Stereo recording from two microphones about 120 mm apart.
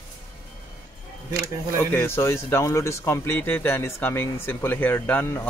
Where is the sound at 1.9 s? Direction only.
20° left (ahead or behind).